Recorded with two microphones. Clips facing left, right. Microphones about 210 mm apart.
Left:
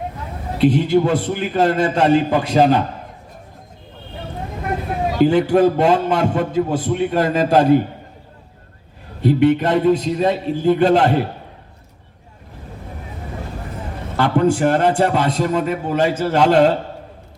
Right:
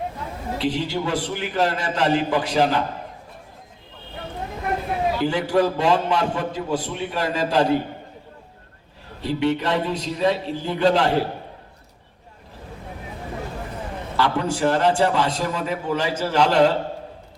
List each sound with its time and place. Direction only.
0.6 s a man's voice: 55° left (ahead or behind)
5.3 s a man's voice: 55° left (ahead or behind)
9.2 s a man's voice: 50° left (ahead or behind)
14.2 s a man's voice: 55° left (ahead or behind)